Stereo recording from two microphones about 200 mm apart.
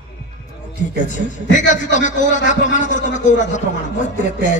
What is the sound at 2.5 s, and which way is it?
A man's voice, 40° left (ahead or behind).